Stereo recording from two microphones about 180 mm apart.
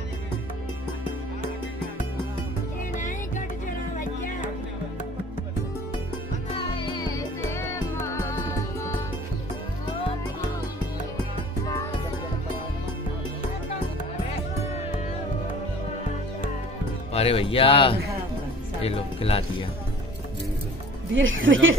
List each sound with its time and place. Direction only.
3.0 s music: 45° left (ahead or behind)
6.5 s music: 25° left (ahead or behind)
17.1 s speech: 35° left (ahead or behind)
21.1 s speech: 90° right